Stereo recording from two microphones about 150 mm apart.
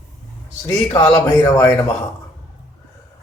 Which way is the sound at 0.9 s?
20° left (ahead or behind).